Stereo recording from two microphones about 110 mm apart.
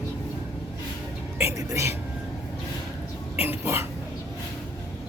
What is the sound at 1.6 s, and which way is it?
Speech, 30° right (ahead or behind).